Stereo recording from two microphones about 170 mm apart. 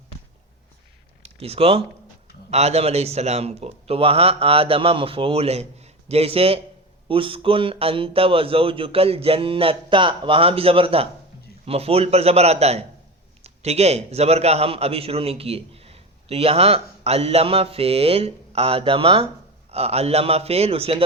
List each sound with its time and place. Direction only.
1.2 s a man's voice: 35° right (ahead or behind)